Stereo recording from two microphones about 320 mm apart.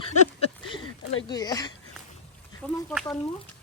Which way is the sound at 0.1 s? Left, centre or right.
Centre.